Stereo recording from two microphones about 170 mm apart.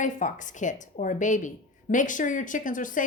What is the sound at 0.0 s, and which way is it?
A woman's voice, 45° left (ahead or behind).